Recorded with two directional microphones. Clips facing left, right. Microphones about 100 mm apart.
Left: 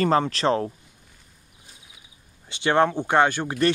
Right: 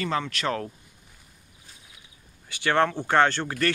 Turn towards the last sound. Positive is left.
turn(degrees=20)  # may be behind; listen again after turning